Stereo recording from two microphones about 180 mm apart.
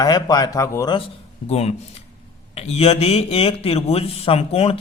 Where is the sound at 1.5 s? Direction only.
35° left (ahead or behind).